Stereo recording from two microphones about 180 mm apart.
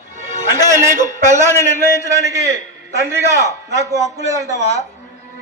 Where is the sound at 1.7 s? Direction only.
15° right (ahead or behind).